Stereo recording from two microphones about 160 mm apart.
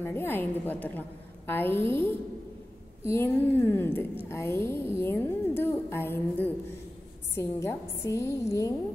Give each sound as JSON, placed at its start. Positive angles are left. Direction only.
{"t": 0.0, "sound": "a woman's voice", "side_deg": 15}